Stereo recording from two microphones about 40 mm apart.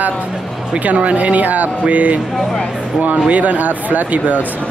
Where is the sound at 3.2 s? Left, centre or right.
Right.